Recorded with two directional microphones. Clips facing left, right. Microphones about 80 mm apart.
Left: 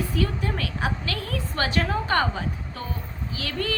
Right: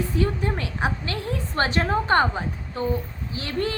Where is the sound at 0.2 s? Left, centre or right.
Right.